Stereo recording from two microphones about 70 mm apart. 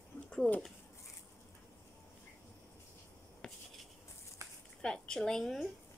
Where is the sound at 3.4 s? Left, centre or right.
Centre.